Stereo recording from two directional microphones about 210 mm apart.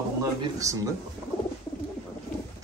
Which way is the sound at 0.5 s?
15° right (ahead or behind).